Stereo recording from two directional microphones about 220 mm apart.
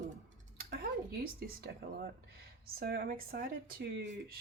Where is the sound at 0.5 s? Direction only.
45° right (ahead or behind).